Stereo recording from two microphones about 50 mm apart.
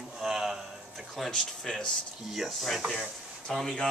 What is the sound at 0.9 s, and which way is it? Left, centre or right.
Speech, centre.